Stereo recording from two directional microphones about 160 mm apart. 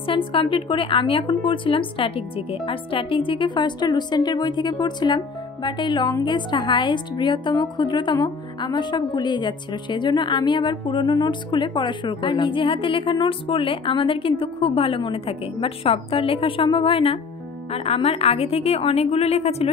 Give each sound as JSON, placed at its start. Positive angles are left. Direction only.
{"t": 0.0, "sound": "a woman's voice", "side_deg": 30}